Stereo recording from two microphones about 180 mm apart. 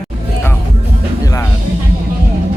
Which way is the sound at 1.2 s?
20° left (ahead or behind).